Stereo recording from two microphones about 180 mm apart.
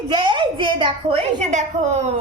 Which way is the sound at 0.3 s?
25° right (ahead or behind).